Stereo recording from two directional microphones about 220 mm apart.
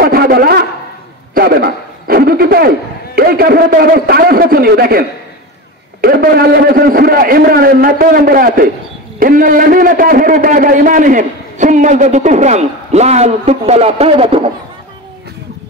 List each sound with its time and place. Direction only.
0.0 s a man's voice: 45° right (ahead or behind)
1.3 s a sound: 45° right (ahead or behind)
3.2 s a man's voice: 45° right (ahead or behind); by 14.4 s 25° right (ahead or behind)